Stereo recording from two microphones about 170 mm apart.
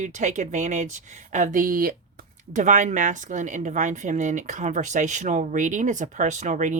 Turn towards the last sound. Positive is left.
turn(degrees=-50)  # may be behind; listen again after turning